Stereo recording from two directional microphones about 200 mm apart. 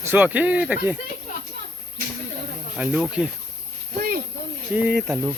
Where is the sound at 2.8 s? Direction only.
5° right (ahead or behind).